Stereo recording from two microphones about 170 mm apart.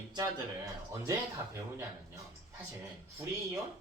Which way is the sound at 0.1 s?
20° right (ahead or behind).